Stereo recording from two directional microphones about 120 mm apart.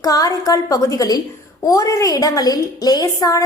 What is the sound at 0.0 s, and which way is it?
A woman's voice, 30° left (ahead or behind).